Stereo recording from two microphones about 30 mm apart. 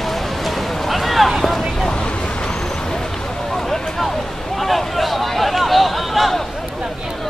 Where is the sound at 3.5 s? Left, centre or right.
Centre.